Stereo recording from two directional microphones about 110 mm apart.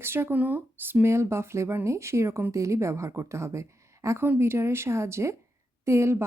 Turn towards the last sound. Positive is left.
turn(degrees=-25)  # may be behind; listen again after turning